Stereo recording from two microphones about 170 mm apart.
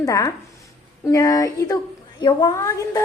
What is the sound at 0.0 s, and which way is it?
A woman's voice, 20° left (ahead or behind).